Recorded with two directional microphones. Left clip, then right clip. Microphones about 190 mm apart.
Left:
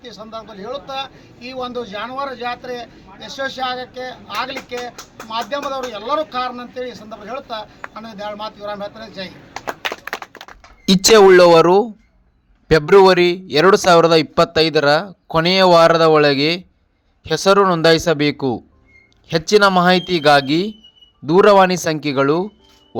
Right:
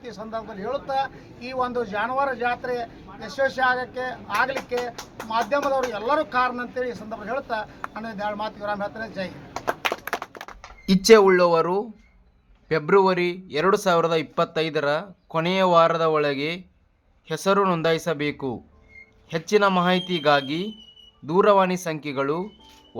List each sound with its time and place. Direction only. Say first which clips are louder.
0.0 s a man's voice: left 1 dB; 5° right (ahead or behind)
10.8 s speech: left 6 dB; 30° left (ahead or behind)